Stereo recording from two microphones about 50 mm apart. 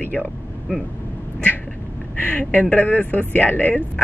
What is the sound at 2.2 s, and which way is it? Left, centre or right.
A man's voice, left.